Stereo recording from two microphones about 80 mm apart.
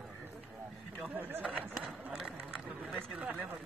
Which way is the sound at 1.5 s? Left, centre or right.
Centre.